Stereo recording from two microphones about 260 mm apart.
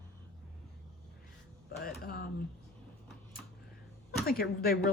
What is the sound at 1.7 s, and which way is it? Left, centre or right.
Speech, left.